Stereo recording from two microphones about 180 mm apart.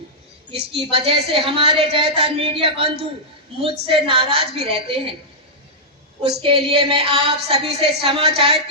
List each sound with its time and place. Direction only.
0.5 s a woman's voice: 30° right (ahead or behind)
6.2 s a woman's voice: 30° right (ahead or behind)